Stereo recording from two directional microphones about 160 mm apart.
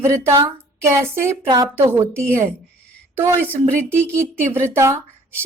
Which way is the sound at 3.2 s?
15° right (ahead or behind).